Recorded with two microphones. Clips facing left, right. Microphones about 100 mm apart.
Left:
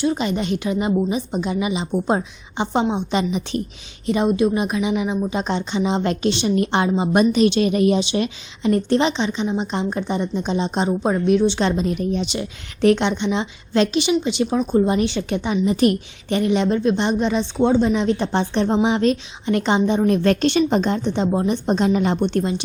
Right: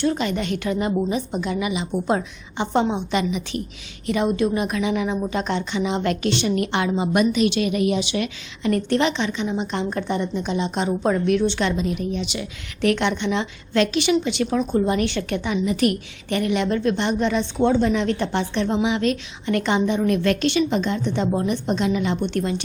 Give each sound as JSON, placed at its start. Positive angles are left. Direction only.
{"t": 0.0, "sound": "a woman's voice", "side_deg": 20}
{"t": 11.6, "sound": "a woman's voice", "side_deg": 40}
{"t": 22.4, "sound": "a woman's voice", "side_deg": 25}